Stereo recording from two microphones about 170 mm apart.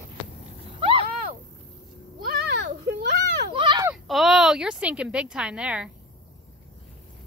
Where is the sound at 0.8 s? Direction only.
30° right (ahead or behind).